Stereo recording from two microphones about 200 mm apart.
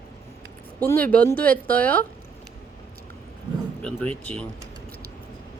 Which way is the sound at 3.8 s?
5° left (ahead or behind).